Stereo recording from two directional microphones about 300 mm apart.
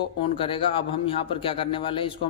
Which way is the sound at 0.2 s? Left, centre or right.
Centre.